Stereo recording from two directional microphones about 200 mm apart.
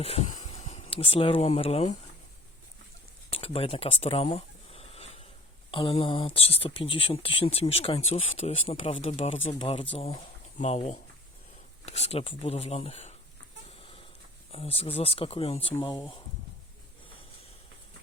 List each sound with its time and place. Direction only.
0.0 s speech: 30° left (ahead or behind)
3.3 s a sound: 30° left (ahead or behind)
5.7 s speech: 25° left (ahead or behind)
14.5 s speech: 30° left (ahead or behind)
15.7 s speech: 15° left (ahead or behind)